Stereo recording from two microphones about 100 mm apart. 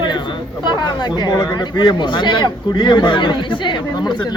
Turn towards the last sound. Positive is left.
turn(degrees=50)  # may be behind; listen again after turning